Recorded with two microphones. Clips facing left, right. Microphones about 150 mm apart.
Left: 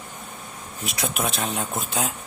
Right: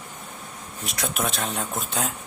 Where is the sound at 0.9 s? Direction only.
Centre (ahead or behind).